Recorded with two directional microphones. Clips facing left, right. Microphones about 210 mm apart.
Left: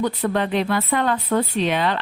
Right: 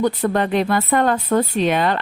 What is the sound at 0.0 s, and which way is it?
Speech, 45° right (ahead or behind).